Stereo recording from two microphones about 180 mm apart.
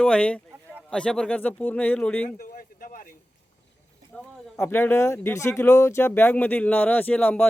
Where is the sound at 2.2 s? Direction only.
50° left (ahead or behind).